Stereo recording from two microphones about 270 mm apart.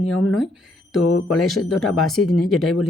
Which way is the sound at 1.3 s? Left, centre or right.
Centre.